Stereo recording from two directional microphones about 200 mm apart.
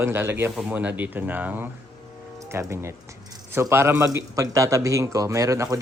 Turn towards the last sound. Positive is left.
turn(degrees=-15)  # may be behind; listen again after turning